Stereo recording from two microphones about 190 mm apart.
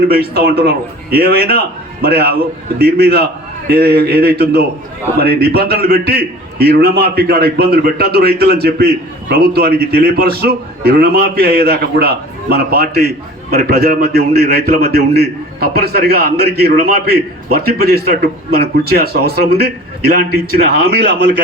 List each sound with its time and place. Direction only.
0.1 s a man's voice: 55° right (ahead or behind)